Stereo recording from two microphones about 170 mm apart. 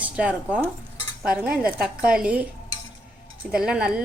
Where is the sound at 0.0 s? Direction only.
10° right (ahead or behind).